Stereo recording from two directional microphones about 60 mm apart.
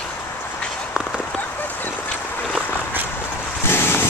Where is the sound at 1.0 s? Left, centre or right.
Centre.